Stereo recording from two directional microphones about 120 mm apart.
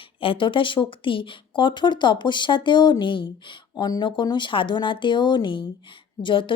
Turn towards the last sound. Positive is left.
turn(degrees=45)  # may be behind; listen again after turning